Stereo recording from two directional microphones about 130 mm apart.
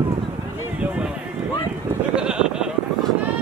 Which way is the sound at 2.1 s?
5° right (ahead or behind).